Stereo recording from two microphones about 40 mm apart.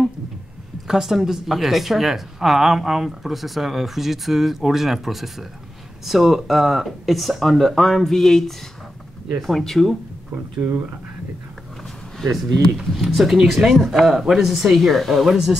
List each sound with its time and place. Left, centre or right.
0.8 s speech: centre
10.6 s speech: right
12.7 s speech: centre